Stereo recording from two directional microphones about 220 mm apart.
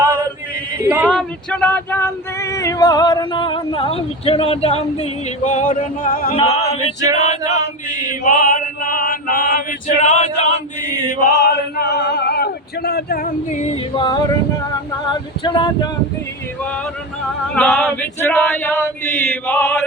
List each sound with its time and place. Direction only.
0.0 s male singing: 10° right (ahead or behind)
0.8 s a sound: 10° right (ahead or behind)
1.0 s female singing: centre (ahead or behind); by 6.3 s 40° left (ahead or behind)
6.3 s female singing: 25° left (ahead or behind)
7.9 s chant: 35° left (ahead or behind)
11.3 s male singing: 50° left (ahead or behind); by 14.2 s 20° left (ahead or behind)
15.4 s female singing: 20° left (ahead or behind)
17.5 s male singing: 5° left (ahead or behind)